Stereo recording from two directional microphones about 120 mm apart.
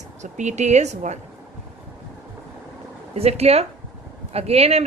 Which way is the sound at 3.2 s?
60° right (ahead or behind).